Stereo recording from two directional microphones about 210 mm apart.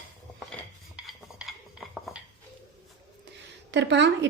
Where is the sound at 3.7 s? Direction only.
55° right (ahead or behind).